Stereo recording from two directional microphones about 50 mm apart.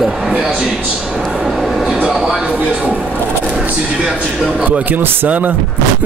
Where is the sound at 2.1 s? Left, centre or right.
Centre.